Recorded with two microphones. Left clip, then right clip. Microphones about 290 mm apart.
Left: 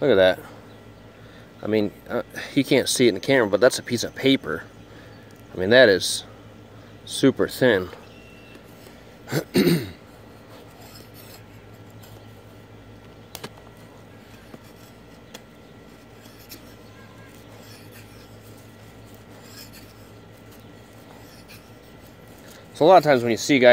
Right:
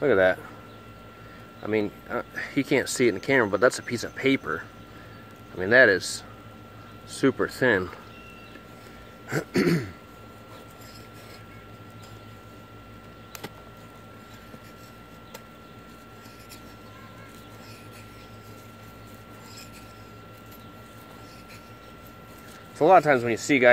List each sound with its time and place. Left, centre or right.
0.0 s speech: left
1.6 s speech: left
9.3 s speech: left
22.8 s speech: left